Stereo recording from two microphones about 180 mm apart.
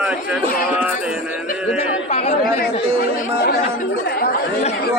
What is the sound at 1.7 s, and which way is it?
Speech, 35° left (ahead or behind).